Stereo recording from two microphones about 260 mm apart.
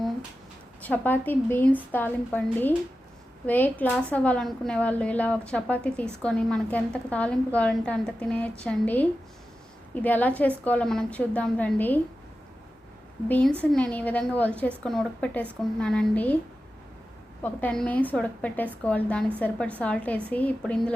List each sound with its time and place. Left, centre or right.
0.8 s a woman's voice: centre
13.2 s a woman's voice: centre
17.4 s a woman's voice: centre